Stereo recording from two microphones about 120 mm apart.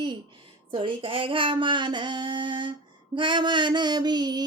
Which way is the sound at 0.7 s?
45° right (ahead or behind).